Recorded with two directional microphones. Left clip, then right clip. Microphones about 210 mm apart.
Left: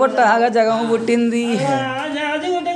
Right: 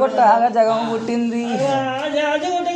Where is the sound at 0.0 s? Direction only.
30° left (ahead or behind).